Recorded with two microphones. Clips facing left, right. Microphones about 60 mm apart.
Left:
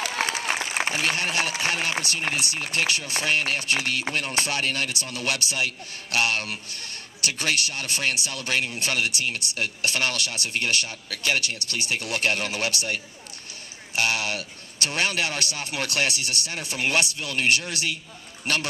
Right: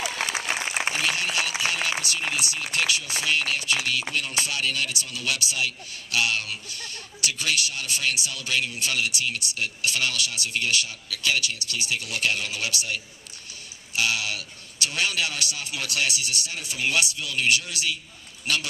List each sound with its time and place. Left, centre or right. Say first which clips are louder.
0.0 s applause: left 2 dB; left
0.9 s a sound: left 3 dB; left
1.6 s a man's voice: left 1 dB; left